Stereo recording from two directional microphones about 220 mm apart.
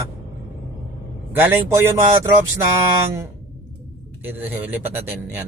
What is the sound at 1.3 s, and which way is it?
Speech, 10° right (ahead or behind).